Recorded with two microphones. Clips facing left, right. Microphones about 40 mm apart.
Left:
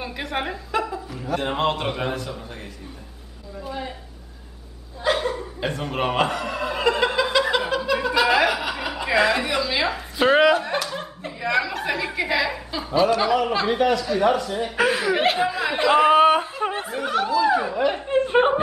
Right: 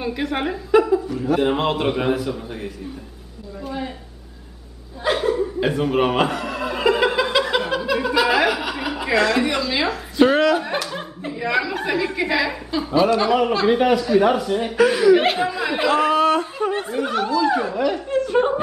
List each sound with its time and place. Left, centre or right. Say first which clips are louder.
0.0 s a woman's voice: right 4 dB; centre
5.0 s chuckle: right 3 dB; centre
9.2 s a woman's voice: right 1 dB; centre
14.8 s a woman's voice: right 6 dB; centre
15.9 s speech: left 3 dB; centre
16.7 s a woman's voice: right 2 dB; centre
17.8 s speech: even; left